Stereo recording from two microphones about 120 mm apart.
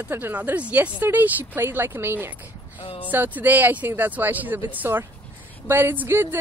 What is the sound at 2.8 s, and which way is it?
Speech, 50° left (ahead or behind).